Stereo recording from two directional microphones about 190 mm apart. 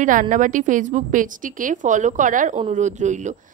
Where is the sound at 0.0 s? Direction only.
40° right (ahead or behind).